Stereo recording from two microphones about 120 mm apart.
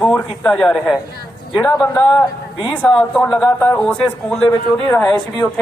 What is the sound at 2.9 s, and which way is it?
A man's voice, 10° left (ahead or behind).